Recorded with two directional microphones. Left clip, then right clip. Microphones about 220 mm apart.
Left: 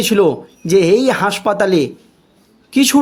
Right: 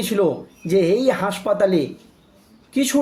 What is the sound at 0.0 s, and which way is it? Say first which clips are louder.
Speech: left 7 dB; 45° left (ahead or behind).